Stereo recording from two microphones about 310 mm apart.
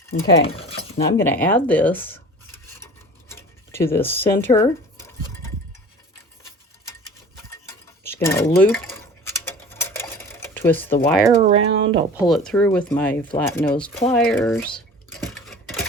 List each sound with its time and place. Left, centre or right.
0.1 s speech: left
1.2 s a sound: centre
8.0 s speech: centre
9.2 s sewing machine: centre
11.0 s speech: centre
11.3 s speech: centre
12.5 s speech: centre